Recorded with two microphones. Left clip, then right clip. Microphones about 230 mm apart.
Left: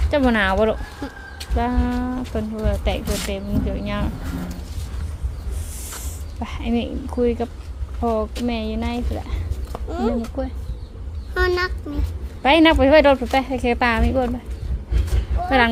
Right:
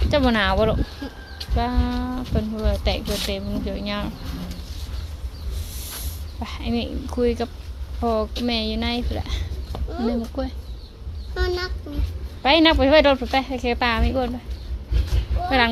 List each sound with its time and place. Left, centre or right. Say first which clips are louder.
0.1 s speech: left 1 dB; centre
6.4 s a woman's voice: left 2 dB; centre
9.9 s speech: left 3 dB; left
10.4 s speech: left 1 dB; centre
11.3 s speech: left 6 dB; left
12.4 s a woman's voice: left 2 dB; centre
15.4 s speech: left 2 dB; centre